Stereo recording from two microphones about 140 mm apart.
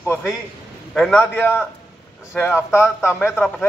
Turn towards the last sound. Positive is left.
turn(degrees=15)  # may be behind; listen again after turning